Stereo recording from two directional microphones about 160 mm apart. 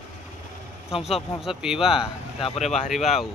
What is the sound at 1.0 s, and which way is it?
Speech, 40° left (ahead or behind).